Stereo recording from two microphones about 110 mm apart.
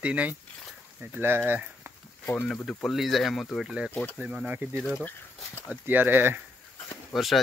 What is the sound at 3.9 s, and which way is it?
Speech, 15° left (ahead or behind).